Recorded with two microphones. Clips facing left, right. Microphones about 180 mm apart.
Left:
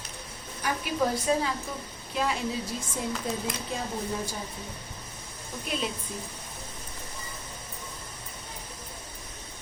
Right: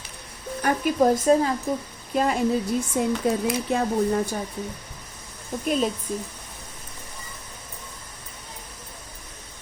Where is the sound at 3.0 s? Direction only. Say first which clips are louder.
Right 8 dB; 60° right (ahead or behind).